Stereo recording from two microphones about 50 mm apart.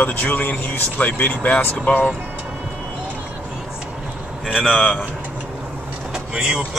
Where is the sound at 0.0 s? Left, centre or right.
Left.